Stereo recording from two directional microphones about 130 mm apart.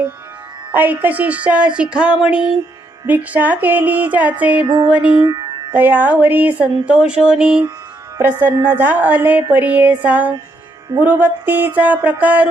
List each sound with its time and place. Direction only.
0.7 s speech: 15° right (ahead or behind)
5.2 s music: 30° right (ahead or behind)
5.7 s speech: 15° right (ahead or behind)